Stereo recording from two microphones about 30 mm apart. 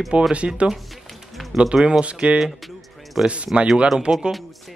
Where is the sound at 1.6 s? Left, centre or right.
Right.